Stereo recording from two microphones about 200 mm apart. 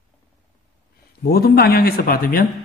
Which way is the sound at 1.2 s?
50° left (ahead or behind).